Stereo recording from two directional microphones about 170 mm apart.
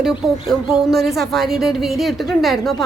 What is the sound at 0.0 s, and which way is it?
A woman's voice, 5° right (ahead or behind).